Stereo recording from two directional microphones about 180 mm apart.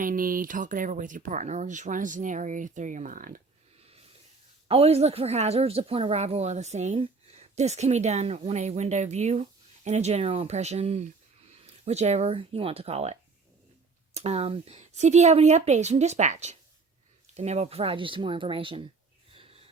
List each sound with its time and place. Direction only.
0.0 s speech: 50° right (ahead or behind)
4.7 s a woman's voice: 35° right (ahead or behind)
19.3 s a sound: 30° right (ahead or behind)